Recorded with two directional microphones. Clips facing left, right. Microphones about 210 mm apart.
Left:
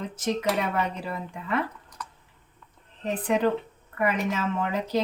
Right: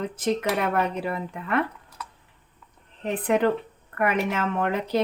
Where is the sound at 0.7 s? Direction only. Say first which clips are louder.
Right 4 dB; 60° right (ahead or behind).